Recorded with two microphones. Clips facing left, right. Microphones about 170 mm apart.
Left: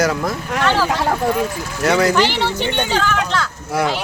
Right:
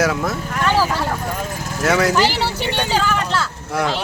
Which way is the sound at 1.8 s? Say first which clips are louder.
Left 1 dB; centre (ahead or behind).